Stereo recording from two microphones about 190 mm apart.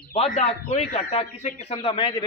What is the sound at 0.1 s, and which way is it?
A man's voice, 35° left (ahead or behind).